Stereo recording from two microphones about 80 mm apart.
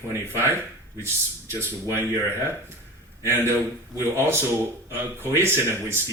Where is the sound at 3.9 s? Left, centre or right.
Right.